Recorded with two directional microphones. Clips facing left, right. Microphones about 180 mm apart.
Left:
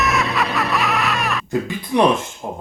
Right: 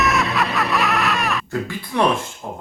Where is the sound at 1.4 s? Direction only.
20° left (ahead or behind).